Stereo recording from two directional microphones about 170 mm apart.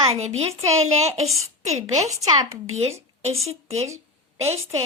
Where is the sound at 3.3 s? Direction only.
40° right (ahead or behind).